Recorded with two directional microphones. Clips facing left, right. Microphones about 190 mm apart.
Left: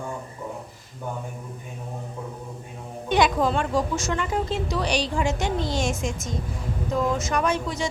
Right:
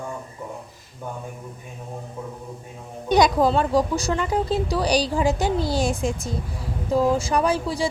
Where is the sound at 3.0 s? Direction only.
40° right (ahead or behind).